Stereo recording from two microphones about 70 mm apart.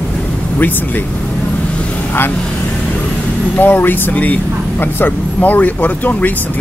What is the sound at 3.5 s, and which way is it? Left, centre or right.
Speech, left.